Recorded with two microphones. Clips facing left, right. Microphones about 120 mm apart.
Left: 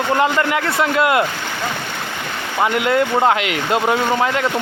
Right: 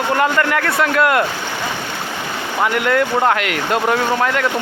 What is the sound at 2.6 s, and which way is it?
Speech, 20° left (ahead or behind).